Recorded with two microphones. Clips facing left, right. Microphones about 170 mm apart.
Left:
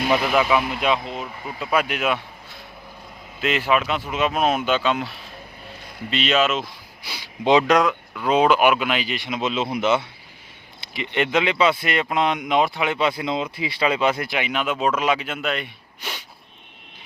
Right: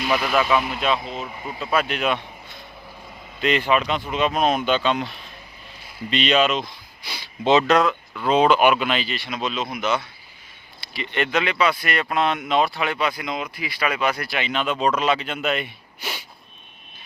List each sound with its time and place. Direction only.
0.1 s speech: 15° left (ahead or behind)
0.4 s speech: centre (ahead or behind)
1.5 s speech: 10° left (ahead or behind); by 16.2 s 5° right (ahead or behind)